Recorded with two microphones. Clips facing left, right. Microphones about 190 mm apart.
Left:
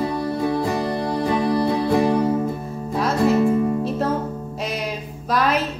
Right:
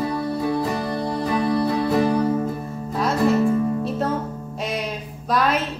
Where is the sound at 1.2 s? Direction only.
20° left (ahead or behind).